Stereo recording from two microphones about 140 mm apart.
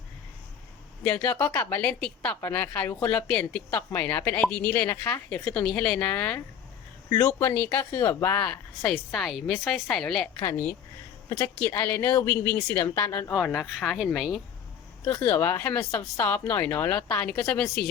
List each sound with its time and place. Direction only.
1.0 s a woman's voice: 10° left (ahead or behind)
7.1 s a woman's voice: 25° left (ahead or behind)
8.8 s speech: centre (ahead or behind)
10.4 s a woman's voice: 15° left (ahead or behind)
13.4 s speech: centre (ahead or behind)
15.0 s a woman's voice: 15° left (ahead or behind)